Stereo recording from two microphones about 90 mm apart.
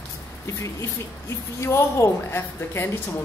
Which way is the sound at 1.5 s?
30° left (ahead or behind).